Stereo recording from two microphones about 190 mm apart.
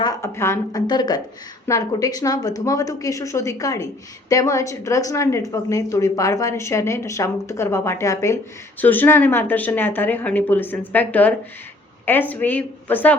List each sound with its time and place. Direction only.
0.0 s a woman's voice: 15° left (ahead or behind)